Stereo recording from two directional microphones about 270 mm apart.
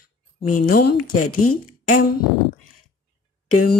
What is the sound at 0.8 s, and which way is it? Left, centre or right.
Speech, left.